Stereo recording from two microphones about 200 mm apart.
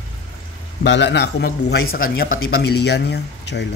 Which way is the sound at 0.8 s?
60° left (ahead or behind).